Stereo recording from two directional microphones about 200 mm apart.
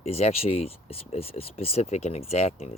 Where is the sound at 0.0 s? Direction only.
30° left (ahead or behind).